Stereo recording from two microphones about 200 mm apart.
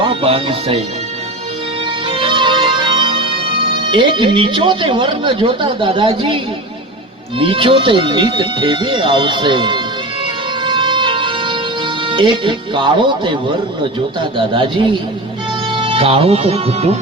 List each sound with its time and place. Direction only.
0.0 s speech: 25° right (ahead or behind)
2.0 s music: 25° right (ahead or behind)
3.9 s speech: 25° right (ahead or behind)
10.6 s music: 25° right (ahead or behind)
12.0 s speech: 25° right (ahead or behind)